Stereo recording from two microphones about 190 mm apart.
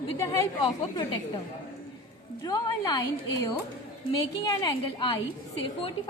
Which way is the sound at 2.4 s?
20° left (ahead or behind).